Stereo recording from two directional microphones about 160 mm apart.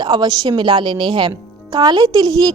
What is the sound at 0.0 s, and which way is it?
A woman's voice, 25° right (ahead or behind).